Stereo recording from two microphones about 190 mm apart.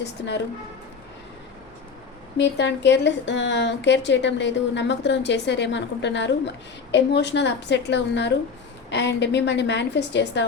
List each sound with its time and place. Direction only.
0.0 s speech: 65° left (ahead or behind)
2.4 s a woman's voice: 65° left (ahead or behind)